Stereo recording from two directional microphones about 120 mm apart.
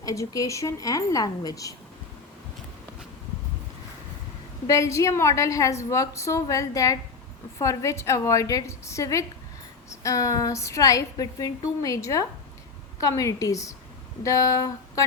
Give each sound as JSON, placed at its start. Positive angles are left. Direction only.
{"t": 0.0, "sound": "a woman's voice", "side_deg": 30}
{"t": 4.6, "sound": "a woman's voice", "side_deg": 25}